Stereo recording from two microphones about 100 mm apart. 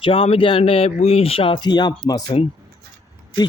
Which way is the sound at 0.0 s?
70° left (ahead or behind).